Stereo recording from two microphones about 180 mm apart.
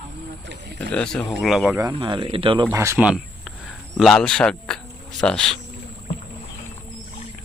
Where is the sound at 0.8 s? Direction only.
5° left (ahead or behind).